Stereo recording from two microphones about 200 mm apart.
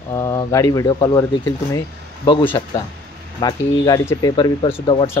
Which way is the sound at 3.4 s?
20° left (ahead or behind).